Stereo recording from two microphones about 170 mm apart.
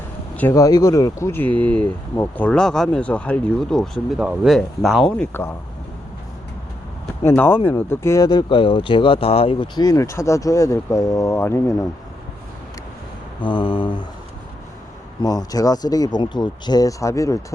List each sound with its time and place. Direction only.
0.3 s speech: 15° left (ahead or behind)
7.3 s speech: 15° left (ahead or behind)
13.4 s speech: 30° left (ahead or behind)
15.2 s speech: 20° left (ahead or behind)